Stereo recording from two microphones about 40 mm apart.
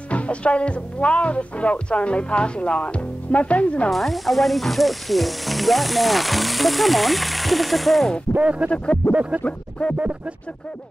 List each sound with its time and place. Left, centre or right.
0.1 s speech: left
3.9 s sizzle: centre
8.4 s a sound: right
8.6 s speech: left
9.1 s a sound: right
9.5 s speech: left